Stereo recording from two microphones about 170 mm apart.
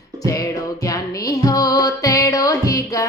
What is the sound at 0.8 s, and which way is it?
Music, 20° left (ahead or behind).